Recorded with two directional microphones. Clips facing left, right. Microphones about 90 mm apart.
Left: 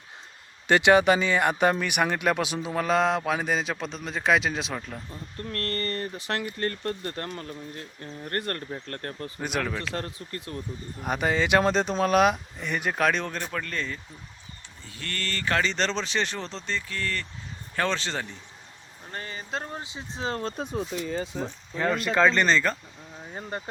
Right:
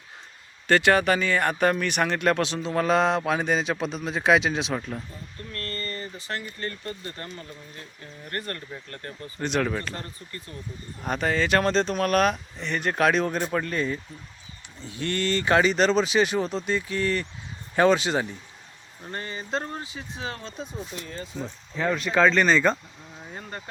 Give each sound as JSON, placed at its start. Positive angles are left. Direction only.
{"t": 0.7, "sound": "speech", "side_deg": 15}
{"t": 5.5, "sound": "speech", "side_deg": 60}
{"t": 8.3, "sound": "speech", "side_deg": 50}
{"t": 9.6, "sound": "speech", "side_deg": -5}
{"t": 9.9, "sound": "speech", "side_deg": 80}
{"t": 11.0, "sound": "speech", "side_deg": 10}
{"t": 13.0, "sound": "speech", "side_deg": -5}
{"t": 13.4, "sound": "speech", "side_deg": -15}
{"t": 19.1, "sound": "speech", "side_deg": 0}
{"t": 19.8, "sound": "speech", "side_deg": 25}
{"t": 21.8, "sound": "speech", "side_deg": 0}
{"t": 22.5, "sound": "speech", "side_deg": -20}
{"t": 23.2, "sound": "speech", "side_deg": 15}